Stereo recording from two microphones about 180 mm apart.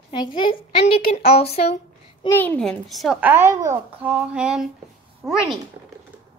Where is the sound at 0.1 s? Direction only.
25° left (ahead or behind).